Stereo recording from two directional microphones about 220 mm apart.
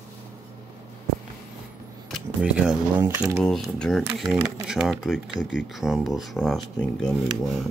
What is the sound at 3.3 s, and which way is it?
Speech, centre (ahead or behind).